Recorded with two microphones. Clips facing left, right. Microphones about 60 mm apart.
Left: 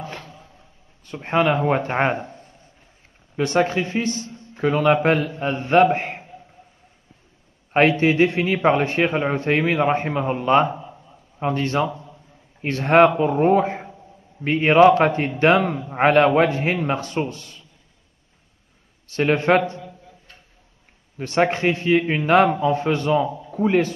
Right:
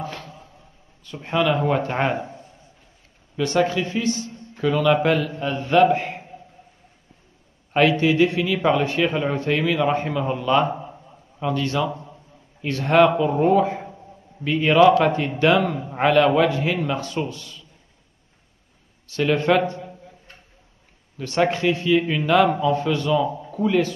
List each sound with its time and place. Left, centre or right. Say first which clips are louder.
0.0 s a sound: right 2 dB; left
1.0 s a man's voice: left 2 dB; left
3.3 s a man's voice: left 1 dB; left
8.0 s a man's voice: left 1 dB; left
11.9 s a sound: right 2 dB; right
12.6 s a man's voice: left 2 dB; left
19.0 s a man's voice: left 1 dB; left
21.2 s a man's voice: left 1 dB; left